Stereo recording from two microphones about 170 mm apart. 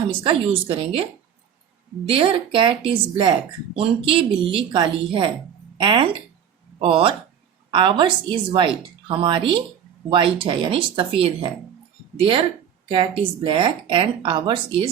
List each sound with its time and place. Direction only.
0.3 s speech: 35° right (ahead or behind)
2.0 s speech: 30° right (ahead or behind)